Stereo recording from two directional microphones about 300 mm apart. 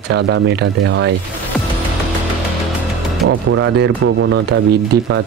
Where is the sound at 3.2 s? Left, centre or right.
Right.